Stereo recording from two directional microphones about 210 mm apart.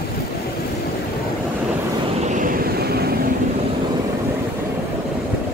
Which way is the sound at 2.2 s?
40° right (ahead or behind).